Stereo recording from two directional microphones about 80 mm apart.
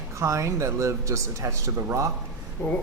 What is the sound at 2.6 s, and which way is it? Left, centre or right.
Speech, left.